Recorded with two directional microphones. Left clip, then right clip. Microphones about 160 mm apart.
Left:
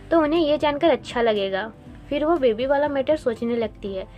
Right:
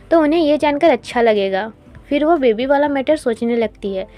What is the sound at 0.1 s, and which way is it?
A woman's voice, 40° right (ahead or behind).